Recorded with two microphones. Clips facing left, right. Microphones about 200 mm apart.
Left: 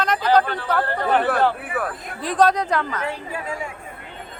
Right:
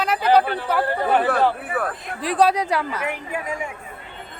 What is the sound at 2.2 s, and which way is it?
Speech, 10° right (ahead or behind).